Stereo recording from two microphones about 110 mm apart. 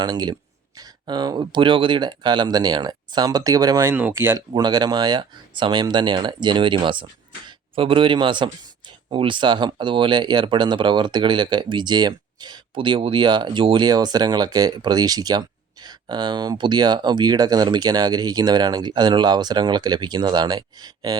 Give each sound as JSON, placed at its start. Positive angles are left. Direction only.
{"t": 0.0, "sound": "speech", "side_deg": -40}
{"t": 3.9, "sound": "speech", "side_deg": -20}
{"t": 4.4, "sound": "speech", "side_deg": -40}